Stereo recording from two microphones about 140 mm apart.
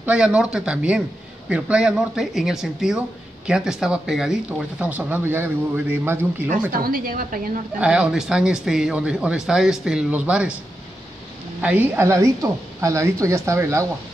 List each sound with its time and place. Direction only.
0.0 s speech: 10° right (ahead or behind)
6.8 s a woman's voice: 90° right
7.8 s speech: 5° right (ahead or behind)
11.6 s speech: 10° right (ahead or behind)